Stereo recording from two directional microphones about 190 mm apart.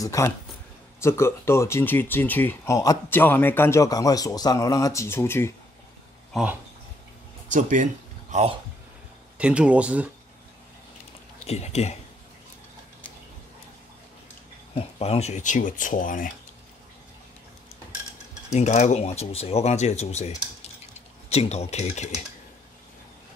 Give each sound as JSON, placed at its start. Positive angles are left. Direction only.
{"t": 0.0, "sound": "speech", "side_deg": 15}
{"t": 6.3, "sound": "speech", "side_deg": -5}
{"t": 7.4, "sound": "speech", "side_deg": -40}
{"t": 9.4, "sound": "speech", "side_deg": -5}
{"t": 11.4, "sound": "speech", "side_deg": 35}
{"t": 14.7, "sound": "speech", "side_deg": 30}
{"t": 18.5, "sound": "speech", "side_deg": 35}